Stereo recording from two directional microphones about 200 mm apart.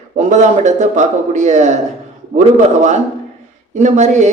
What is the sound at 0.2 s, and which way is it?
A man's voice, 35° right (ahead or behind).